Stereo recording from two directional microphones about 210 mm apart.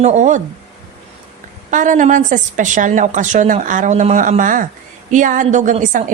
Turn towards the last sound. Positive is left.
turn(degrees=-35)  # may be behind; listen again after turning